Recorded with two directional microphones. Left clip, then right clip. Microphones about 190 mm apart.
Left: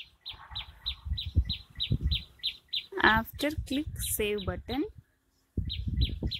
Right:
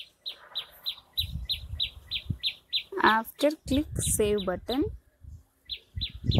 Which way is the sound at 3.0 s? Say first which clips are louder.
Right 2 dB; 15° left (ahead or behind).